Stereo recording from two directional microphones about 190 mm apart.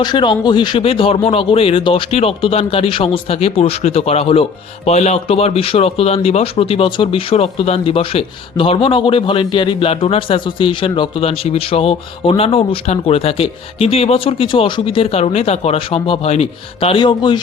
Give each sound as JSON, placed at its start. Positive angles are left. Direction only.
{"t": 0.0, "sound": "speech", "side_deg": 25}